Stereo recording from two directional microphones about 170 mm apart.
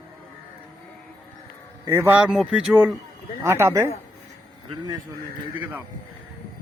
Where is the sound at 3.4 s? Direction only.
15° right (ahead or behind).